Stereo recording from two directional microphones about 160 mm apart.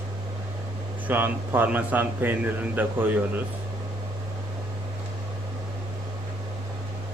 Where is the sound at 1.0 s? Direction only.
10° right (ahead or behind).